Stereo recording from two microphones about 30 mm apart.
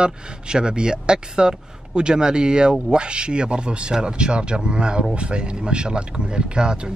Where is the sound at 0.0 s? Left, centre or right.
Right.